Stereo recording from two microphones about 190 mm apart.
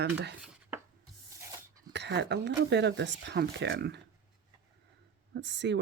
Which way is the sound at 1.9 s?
65° right (ahead or behind).